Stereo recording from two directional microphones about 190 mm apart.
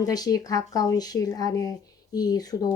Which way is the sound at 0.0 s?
20° left (ahead or behind).